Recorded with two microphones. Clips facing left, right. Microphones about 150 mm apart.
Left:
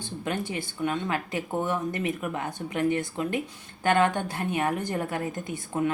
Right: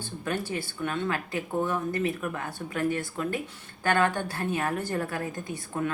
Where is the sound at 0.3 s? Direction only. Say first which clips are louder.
Even; 20° left (ahead or behind).